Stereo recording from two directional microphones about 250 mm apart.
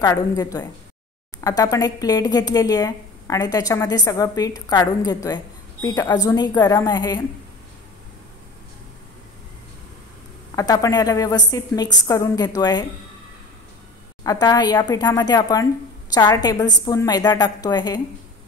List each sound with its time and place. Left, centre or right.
0.0 s speech: centre
10.5 s speech: centre
14.2 s speech: centre